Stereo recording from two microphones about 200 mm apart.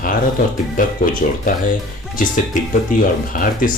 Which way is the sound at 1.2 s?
40° left (ahead or behind).